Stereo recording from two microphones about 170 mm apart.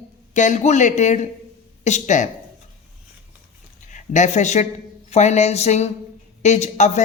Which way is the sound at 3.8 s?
45° left (ahead or behind).